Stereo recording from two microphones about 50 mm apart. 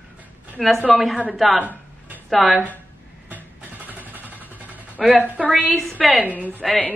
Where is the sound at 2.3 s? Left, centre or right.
Centre.